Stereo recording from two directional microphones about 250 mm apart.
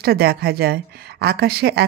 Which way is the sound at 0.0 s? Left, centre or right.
Right.